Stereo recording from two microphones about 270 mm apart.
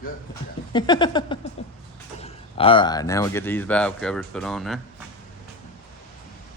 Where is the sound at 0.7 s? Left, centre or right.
Centre.